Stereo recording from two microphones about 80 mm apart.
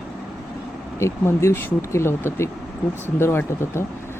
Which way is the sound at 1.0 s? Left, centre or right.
Left.